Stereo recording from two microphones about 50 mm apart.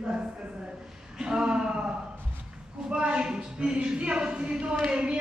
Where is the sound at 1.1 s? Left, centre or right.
Centre.